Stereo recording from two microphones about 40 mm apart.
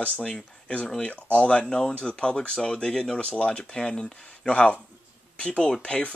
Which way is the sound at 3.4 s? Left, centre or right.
Left.